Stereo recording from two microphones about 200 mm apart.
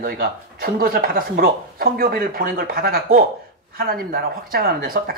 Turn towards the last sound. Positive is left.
turn(degrees=-45)  # may be behind; listen again after turning